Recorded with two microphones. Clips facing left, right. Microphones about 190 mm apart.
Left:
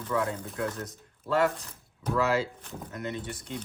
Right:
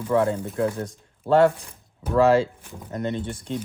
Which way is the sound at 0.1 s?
30° right (ahead or behind).